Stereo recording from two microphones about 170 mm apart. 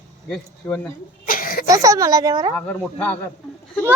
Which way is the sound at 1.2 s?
55° left (ahead or behind).